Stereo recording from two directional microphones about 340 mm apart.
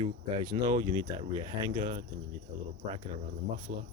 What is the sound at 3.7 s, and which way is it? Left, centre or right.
Speech, right.